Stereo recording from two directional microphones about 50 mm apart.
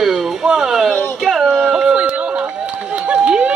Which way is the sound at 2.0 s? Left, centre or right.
Right.